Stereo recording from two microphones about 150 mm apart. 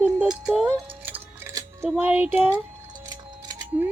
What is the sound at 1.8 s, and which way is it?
Speech, 10° right (ahead or behind).